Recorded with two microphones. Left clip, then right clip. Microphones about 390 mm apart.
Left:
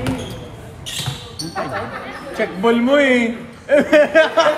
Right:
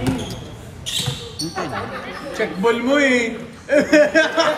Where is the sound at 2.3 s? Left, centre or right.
Centre.